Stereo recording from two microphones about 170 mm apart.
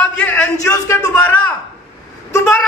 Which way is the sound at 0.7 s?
20° left (ahead or behind).